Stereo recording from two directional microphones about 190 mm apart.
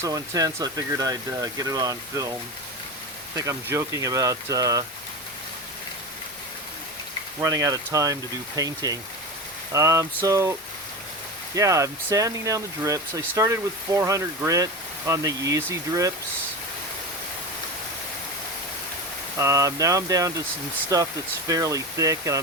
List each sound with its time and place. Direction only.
0.0 s speech: 20° right (ahead or behind)
3.3 s speech: 15° right (ahead or behind)
7.3 s speech: 20° right (ahead or behind)
11.5 s speech: 15° right (ahead or behind)
19.4 s speech: 15° right (ahead or behind)